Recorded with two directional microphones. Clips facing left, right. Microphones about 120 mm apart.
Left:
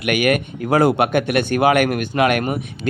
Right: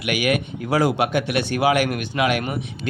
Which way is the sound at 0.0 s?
50° left (ahead or behind).